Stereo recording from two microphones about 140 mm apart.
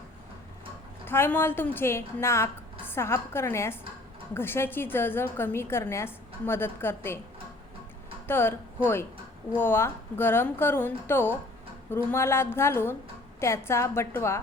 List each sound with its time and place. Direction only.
1.0 s a woman's voice: 15° left (ahead or behind)
8.3 s a woman's voice: 15° left (ahead or behind)